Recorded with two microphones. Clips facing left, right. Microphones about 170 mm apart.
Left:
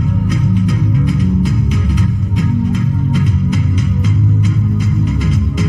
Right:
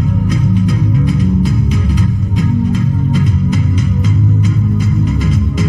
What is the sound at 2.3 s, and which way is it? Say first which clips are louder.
Music: right 2 dB; 35° right (ahead or behind).